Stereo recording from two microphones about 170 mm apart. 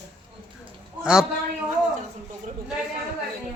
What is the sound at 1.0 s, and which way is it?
Speech, 5° right (ahead or behind).